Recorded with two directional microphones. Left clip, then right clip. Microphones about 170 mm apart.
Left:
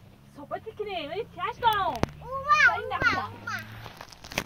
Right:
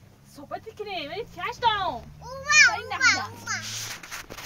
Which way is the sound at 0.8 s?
10° left (ahead or behind).